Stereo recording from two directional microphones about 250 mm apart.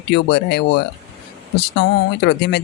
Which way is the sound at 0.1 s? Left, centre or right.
Left.